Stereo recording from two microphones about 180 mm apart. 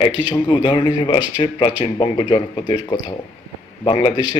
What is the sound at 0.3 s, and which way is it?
A man's voice, 25° left (ahead or behind).